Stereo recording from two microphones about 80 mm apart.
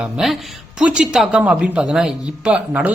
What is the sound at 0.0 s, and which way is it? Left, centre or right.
A man's voice, centre.